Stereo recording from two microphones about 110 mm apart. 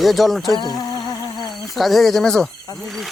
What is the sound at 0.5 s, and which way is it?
Music, 40° left (ahead or behind).